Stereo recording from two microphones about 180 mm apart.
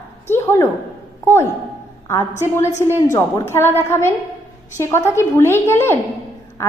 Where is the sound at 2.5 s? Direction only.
15° left (ahead or behind).